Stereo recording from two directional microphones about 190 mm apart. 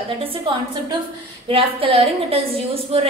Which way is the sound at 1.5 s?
30° right (ahead or behind).